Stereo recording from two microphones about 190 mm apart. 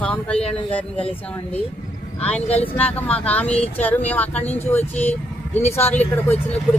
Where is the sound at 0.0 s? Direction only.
5° left (ahead or behind).